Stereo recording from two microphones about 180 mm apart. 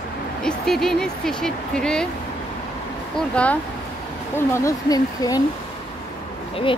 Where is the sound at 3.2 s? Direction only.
5° left (ahead or behind).